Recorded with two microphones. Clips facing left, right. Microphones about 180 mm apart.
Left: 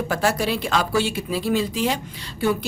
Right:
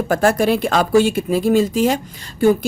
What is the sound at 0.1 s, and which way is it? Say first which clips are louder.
Speech: right 8 dB; 50° right (ahead or behind).